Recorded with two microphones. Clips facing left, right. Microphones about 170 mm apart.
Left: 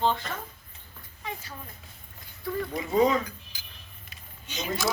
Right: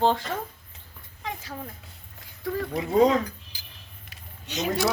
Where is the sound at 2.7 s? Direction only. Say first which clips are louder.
Right 3 dB; 65° right (ahead or behind).